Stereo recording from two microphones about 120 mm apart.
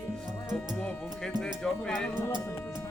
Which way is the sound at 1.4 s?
5° left (ahead or behind).